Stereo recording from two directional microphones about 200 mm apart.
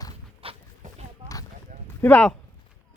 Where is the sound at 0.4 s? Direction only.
35° right (ahead or behind).